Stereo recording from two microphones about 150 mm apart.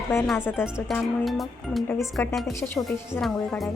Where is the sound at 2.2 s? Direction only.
15° left (ahead or behind).